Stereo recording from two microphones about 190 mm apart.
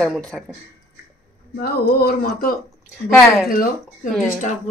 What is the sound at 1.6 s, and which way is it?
Speech, 55° left (ahead or behind).